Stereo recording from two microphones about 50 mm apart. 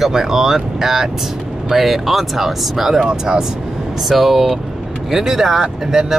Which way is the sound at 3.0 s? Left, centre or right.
Centre.